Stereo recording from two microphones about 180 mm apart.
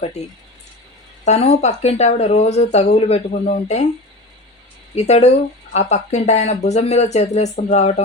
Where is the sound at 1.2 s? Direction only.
40° left (ahead or behind).